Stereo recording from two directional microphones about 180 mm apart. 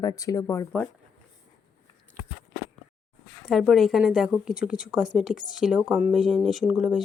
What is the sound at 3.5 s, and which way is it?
A woman's voice, centre (ahead or behind).